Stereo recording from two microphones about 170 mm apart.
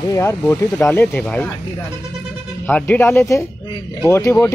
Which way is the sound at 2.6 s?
10° left (ahead or behind).